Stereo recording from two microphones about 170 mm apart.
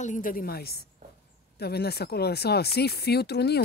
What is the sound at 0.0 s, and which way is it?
A woman's voice, 50° left (ahead or behind).